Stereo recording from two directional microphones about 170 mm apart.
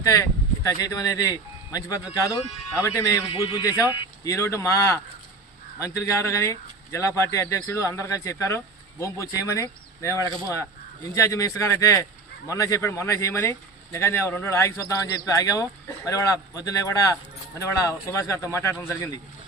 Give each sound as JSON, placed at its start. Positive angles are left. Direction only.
{"t": 0.0, "sound": "speech", "side_deg": 20}